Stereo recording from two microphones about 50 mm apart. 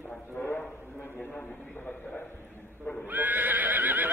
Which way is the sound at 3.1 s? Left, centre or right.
Right.